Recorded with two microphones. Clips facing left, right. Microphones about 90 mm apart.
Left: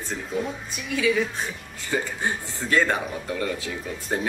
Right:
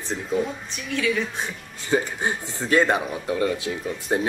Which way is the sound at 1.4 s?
15° right (ahead or behind).